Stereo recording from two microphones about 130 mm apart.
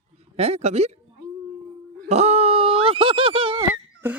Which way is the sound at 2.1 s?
55° right (ahead or behind).